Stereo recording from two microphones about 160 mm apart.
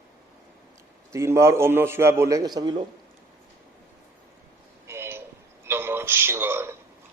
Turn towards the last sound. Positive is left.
turn(degrees=-15)  # may be behind; listen again after turning